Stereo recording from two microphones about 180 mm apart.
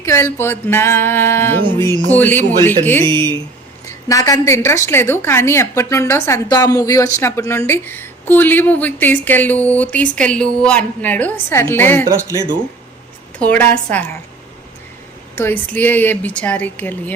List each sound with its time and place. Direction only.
0.0 s a woman's voice: 15° left (ahead or behind)
3.1 s speech: 25° right (ahead or behind)
3.8 s a woman's voice: 20° left (ahead or behind)
13.4 s a woman's voice: 10° left (ahead or behind)
15.4 s a woman's voice: 10° left (ahead or behind)